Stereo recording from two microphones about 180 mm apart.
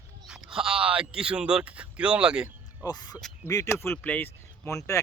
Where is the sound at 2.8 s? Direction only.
20° left (ahead or behind).